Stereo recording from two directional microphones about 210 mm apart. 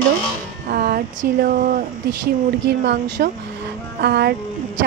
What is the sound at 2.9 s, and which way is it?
A woman's voice, 55° right (ahead or behind).